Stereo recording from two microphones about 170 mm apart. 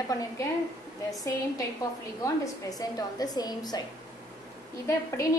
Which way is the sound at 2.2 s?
20° left (ahead or behind).